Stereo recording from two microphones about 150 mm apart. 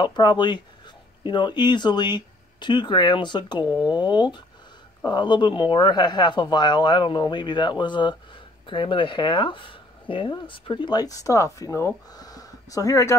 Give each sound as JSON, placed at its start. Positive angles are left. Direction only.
{"t": 0.0, "sound": "speech", "side_deg": 30}